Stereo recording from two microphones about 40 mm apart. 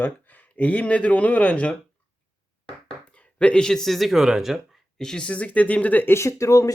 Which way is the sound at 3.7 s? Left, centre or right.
Centre.